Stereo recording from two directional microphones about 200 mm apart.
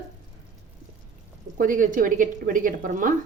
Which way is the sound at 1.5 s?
40° right (ahead or behind).